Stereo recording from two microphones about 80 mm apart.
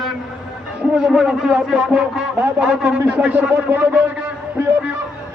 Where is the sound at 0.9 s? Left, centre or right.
Centre; by 4.0 s right.